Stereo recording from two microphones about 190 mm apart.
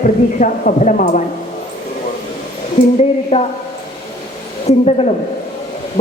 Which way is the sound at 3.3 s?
30° left (ahead or behind).